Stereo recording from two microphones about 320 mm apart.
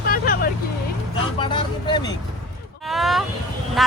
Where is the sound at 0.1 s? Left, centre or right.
Left.